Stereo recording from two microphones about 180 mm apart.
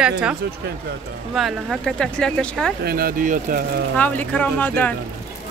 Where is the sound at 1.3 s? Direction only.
Centre (ahead or behind).